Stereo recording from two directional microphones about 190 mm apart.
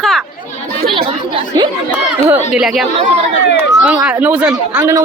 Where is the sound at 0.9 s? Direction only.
30° right (ahead or behind).